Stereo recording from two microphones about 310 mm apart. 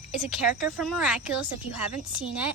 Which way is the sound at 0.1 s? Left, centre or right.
Centre.